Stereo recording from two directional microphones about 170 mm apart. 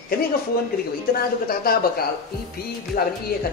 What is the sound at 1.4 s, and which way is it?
Speech, 60° left (ahead or behind).